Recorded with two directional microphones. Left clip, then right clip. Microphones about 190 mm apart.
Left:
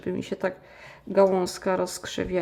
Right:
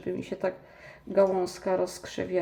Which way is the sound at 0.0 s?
20° left (ahead or behind).